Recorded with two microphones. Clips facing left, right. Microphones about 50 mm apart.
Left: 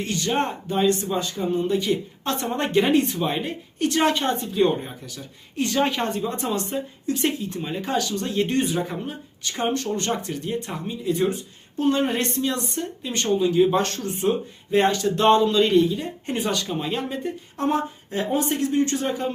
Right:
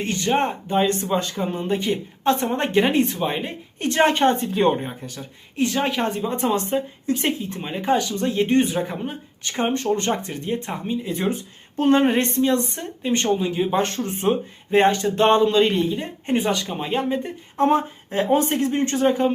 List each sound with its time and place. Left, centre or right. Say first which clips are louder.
0.0 s speech: right 2 dB; right
0.3 s speech: right 4 dB; right
1.0 s speech: right 2 dB; right
2.7 s speech: even; centre
3.8 s speech: right 3 dB; right
5.5 s speech: right 1 dB; centre
6.3 s speech: right 5 dB; right
9.0 s speech: right 2 dB; right
11.8 s speech: right 4 dB; right
12.1 s speech: right 5 dB; right
16.3 s speech: right 4 dB; centre
17.6 s speech: right 5 dB; right